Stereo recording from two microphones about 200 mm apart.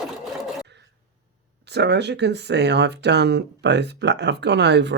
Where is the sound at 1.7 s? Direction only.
60° right (ahead or behind).